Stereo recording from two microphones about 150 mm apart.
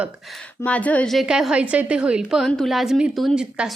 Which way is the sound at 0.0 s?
Centre (ahead or behind).